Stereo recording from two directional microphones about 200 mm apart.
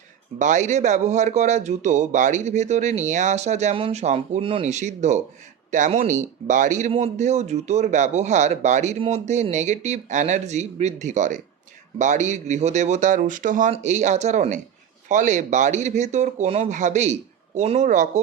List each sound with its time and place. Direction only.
0.3 s speech: 40° right (ahead or behind)